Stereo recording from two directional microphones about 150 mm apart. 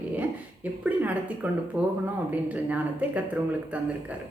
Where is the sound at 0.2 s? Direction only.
10° right (ahead or behind).